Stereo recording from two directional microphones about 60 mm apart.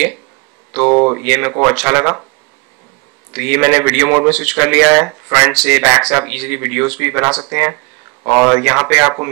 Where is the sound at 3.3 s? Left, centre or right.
Centre.